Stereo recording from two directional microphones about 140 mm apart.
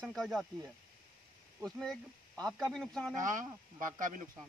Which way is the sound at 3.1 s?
70° right (ahead or behind).